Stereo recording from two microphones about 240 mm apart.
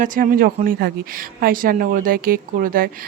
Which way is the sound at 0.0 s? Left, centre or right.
Right.